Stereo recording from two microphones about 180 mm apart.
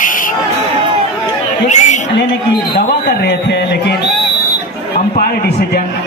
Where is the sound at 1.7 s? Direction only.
40° left (ahead or behind).